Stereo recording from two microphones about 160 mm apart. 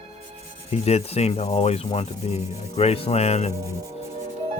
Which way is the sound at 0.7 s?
40° left (ahead or behind).